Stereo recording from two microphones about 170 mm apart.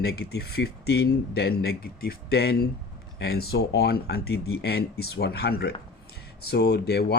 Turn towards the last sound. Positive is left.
turn(degrees=70)  # may be behind; listen again after turning